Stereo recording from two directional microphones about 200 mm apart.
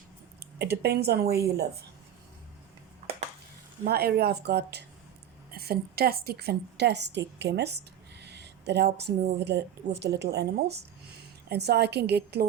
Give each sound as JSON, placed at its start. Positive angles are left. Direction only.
{"t": 0.6, "sound": "a woman's voice", "side_deg": -55}
{"t": 3.8, "sound": "a woman's voice", "side_deg": -50}